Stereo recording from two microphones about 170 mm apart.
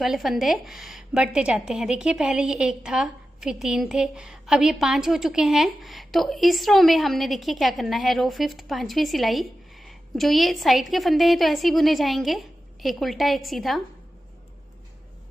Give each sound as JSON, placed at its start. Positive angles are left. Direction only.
{"t": 0.0, "sound": "a woman's voice", "side_deg": 0}